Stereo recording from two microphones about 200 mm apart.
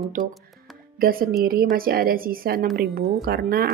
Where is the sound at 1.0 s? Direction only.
45° right (ahead or behind).